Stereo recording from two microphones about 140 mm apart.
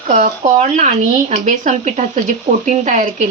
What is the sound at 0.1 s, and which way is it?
A woman's voice, 60° right (ahead or behind).